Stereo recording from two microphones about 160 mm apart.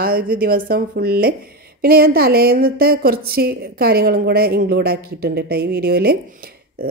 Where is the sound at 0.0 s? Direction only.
65° right (ahead or behind).